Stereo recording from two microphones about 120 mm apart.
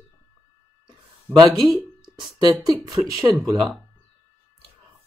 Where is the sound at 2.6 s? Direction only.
30° right (ahead or behind).